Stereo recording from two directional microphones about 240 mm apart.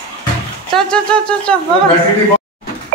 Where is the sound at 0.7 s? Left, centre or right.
Centre.